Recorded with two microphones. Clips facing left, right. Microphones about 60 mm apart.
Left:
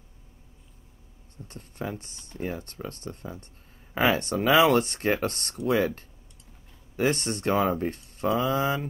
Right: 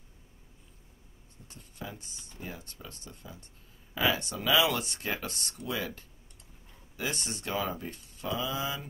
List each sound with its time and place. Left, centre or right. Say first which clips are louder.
1.5 s speech: left 8 dB; left